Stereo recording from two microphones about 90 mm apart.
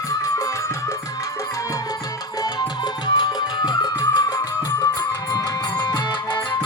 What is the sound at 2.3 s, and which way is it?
Music, 50° left (ahead or behind).